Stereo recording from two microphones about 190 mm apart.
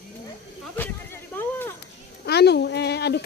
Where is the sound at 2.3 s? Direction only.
60° left (ahead or behind).